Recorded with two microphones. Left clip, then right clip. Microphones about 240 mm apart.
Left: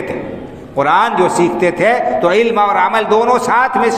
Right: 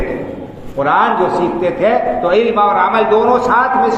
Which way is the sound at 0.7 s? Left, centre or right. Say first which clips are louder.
Left 1 dB; left.